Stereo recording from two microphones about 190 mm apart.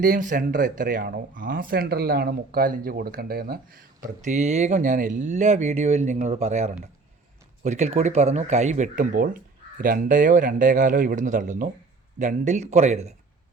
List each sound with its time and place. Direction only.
0.0 s speech: 45° right (ahead or behind)
4.2 s speech: 40° right (ahead or behind)